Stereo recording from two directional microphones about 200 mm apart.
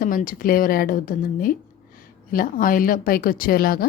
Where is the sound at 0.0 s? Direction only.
45° left (ahead or behind).